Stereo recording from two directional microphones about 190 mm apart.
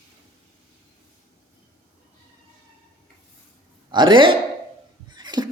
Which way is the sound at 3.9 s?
25° right (ahead or behind).